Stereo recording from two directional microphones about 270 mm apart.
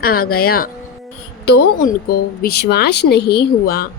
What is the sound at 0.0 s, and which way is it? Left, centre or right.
Speech, left.